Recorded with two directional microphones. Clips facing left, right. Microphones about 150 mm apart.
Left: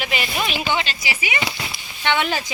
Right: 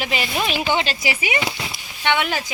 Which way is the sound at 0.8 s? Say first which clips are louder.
Right 4 dB; 45° right (ahead or behind).